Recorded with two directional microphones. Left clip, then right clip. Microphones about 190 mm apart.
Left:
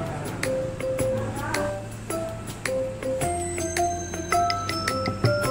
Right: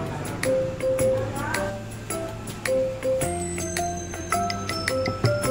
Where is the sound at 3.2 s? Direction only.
Centre (ahead or behind).